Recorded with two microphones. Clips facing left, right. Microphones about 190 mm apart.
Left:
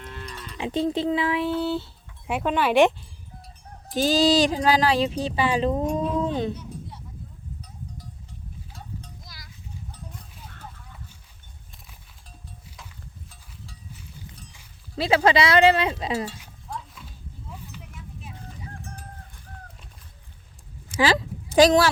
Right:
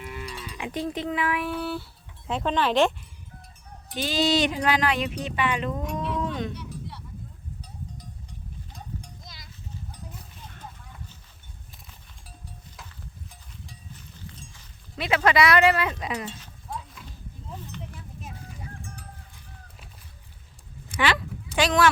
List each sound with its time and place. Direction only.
0.0 s moo: 10° right (ahead or behind)
0.6 s speech: 30° left (ahead or behind)
2.2 s speech: 10° left (ahead or behind)
3.9 s speech: 40° left (ahead or behind)
6.6 s a sound: 70° right (ahead or behind)
8.7 s a sound: 20° right (ahead or behind)
14.9 s speech: 30° left (ahead or behind)
16.7 s horse: centre (ahead or behind)
20.9 s a sound: 30° left (ahead or behind)